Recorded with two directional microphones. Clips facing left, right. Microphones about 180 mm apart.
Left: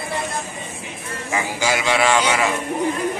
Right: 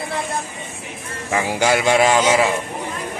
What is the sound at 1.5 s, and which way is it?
Speech, 55° right (ahead or behind).